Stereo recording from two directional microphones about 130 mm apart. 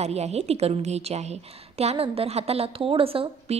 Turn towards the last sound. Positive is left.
turn(degrees=-45)  # may be behind; listen again after turning